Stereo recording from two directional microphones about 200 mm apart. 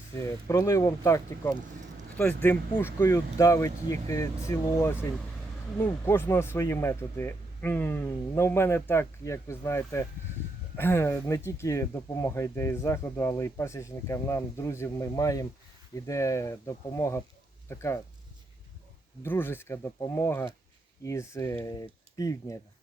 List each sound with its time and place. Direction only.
0.2 s speech: 15° left (ahead or behind)
19.2 s speech: 10° left (ahead or behind)